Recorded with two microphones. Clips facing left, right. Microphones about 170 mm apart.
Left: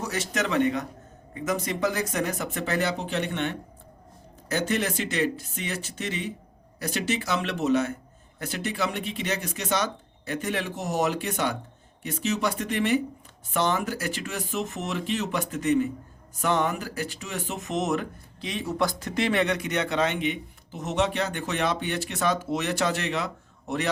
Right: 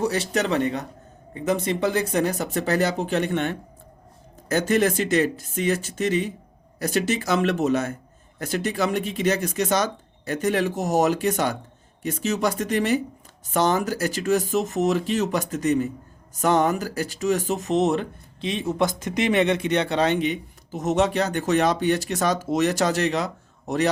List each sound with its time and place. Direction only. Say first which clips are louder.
0.0 s speech: right 6 dB; 30° right (ahead or behind)